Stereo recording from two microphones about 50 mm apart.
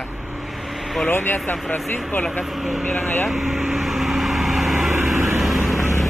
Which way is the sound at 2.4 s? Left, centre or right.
Centre.